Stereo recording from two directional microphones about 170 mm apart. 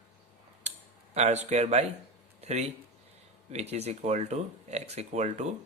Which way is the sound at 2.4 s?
40° right (ahead or behind).